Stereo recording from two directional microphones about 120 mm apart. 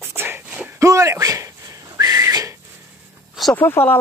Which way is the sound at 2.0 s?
30° right (ahead or behind).